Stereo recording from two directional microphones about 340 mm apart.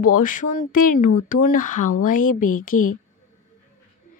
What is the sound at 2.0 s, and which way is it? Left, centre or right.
Speech, left.